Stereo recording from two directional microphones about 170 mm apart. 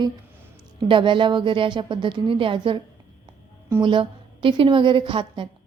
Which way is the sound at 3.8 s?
30° right (ahead or behind).